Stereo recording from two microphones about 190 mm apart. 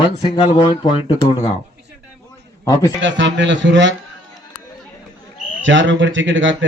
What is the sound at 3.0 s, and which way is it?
Speech, 70° right (ahead or behind).